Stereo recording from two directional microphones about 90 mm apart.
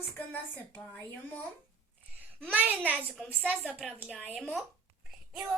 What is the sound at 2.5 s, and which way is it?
A woman's voice, 20° right (ahead or behind).